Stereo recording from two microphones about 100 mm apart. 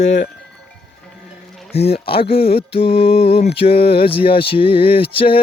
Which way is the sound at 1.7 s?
85° left.